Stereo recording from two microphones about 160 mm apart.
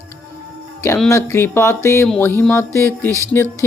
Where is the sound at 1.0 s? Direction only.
15° left (ahead or behind).